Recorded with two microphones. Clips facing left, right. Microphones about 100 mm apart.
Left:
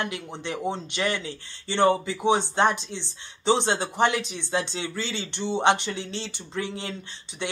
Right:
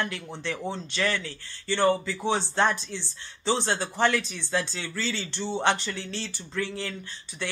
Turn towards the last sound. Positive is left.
turn(degrees=20)  # may be behind; listen again after turning